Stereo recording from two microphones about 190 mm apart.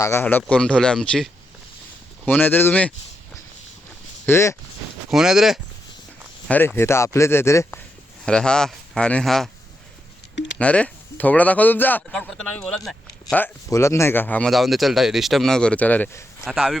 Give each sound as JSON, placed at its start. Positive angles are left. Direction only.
{"t": 0.0, "sound": "speech", "side_deg": 15}
{"t": 4.3, "sound": "speech", "side_deg": 15}
{"t": 5.1, "sound": "speech", "side_deg": -5}
{"t": 6.5, "sound": "speech", "side_deg": 10}
{"t": 8.2, "sound": "speech", "side_deg": 5}
{"t": 10.3, "sound": "a sound", "side_deg": 75}
{"t": 10.6, "sound": "speech", "side_deg": 5}
{"t": 16.4, "sound": "speech", "side_deg": 0}